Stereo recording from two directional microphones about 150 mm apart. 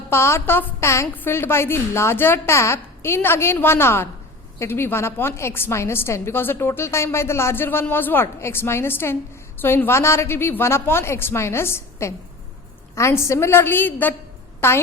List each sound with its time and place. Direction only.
0.1 s a woman's voice: 15° left (ahead or behind)